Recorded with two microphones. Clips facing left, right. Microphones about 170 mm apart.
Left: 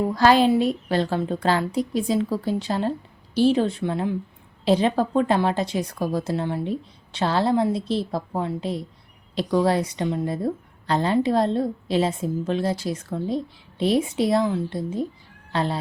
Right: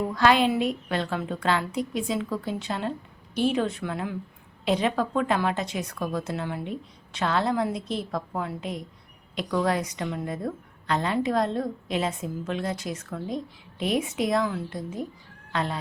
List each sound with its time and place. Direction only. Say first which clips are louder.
0.1 s a woman's voice: left 4 dB; 35° left (ahead or behind)